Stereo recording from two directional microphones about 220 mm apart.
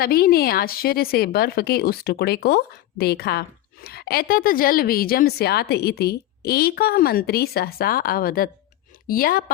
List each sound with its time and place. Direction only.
0.0 s a woman's voice: 40° left (ahead or behind)